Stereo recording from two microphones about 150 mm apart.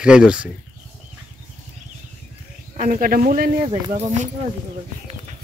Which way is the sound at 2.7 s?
60° right (ahead or behind).